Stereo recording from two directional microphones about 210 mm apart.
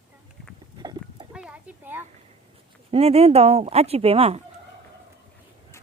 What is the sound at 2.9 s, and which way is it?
Speech, 30° right (ahead or behind).